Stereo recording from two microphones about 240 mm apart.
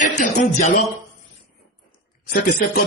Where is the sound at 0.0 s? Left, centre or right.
Left.